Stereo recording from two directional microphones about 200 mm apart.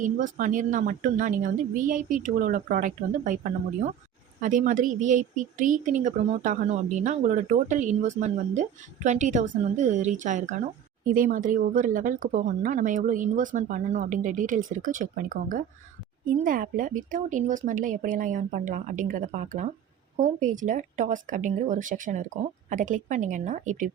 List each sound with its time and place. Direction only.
0.0 s speech: 40° right (ahead or behind)